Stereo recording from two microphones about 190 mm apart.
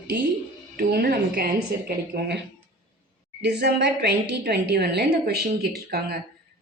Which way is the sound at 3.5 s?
60° right (ahead or behind).